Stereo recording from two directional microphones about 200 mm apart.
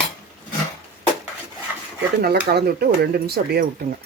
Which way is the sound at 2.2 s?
55° right (ahead or behind).